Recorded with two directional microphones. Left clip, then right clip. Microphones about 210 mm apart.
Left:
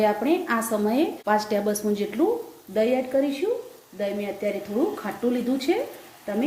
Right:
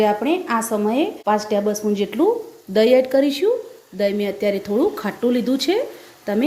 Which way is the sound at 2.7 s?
50° right (ahead or behind).